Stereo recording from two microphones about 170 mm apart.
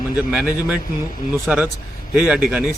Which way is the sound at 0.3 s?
5° right (ahead or behind).